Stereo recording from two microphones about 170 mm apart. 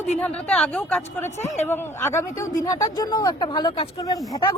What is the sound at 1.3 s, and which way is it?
Speech, 40° left (ahead or behind).